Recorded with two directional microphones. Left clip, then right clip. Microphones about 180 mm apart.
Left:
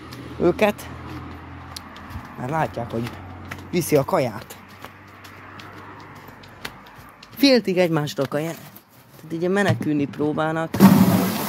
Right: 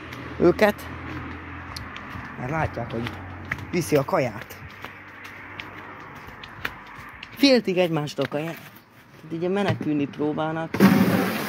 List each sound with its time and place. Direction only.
0.4 s speech: 10° right (ahead or behind)
2.4 s speech: 20° left (ahead or behind)
7.3 s speech: 15° left (ahead or behind); by 10.7 s 30° left (ahead or behind)
10.7 s vehicle: 70° left (ahead or behind)